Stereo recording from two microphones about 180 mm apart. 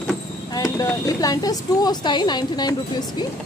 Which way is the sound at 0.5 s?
15° left (ahead or behind).